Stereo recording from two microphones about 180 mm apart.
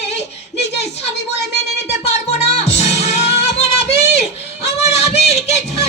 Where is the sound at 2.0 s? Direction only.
35° left (ahead or behind).